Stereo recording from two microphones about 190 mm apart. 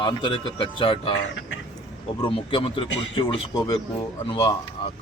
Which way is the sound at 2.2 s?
25° left (ahead or behind).